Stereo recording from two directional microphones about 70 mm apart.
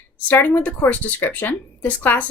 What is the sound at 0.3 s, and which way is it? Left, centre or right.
A woman's voice, left.